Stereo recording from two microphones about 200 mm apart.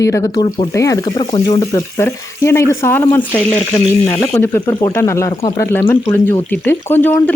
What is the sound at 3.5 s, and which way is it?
A woman's voice, 25° left (ahead or behind).